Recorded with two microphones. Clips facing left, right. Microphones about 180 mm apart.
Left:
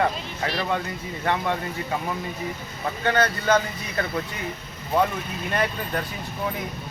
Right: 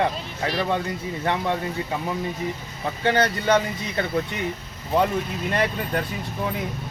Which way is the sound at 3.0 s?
25° right (ahead or behind).